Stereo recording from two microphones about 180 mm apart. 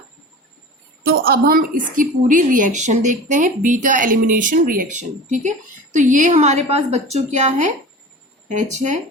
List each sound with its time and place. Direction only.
1.0 s a woman's voice: 55° right (ahead or behind)